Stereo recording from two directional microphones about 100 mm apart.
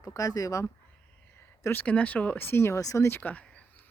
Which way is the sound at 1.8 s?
15° left (ahead or behind).